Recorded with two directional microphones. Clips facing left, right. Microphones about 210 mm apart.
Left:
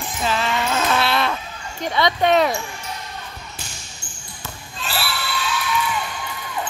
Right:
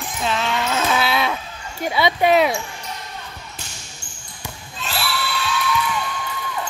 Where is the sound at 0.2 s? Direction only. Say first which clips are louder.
Even; centre (ahead or behind).